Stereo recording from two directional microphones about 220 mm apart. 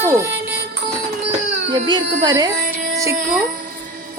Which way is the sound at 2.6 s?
40° right (ahead or behind).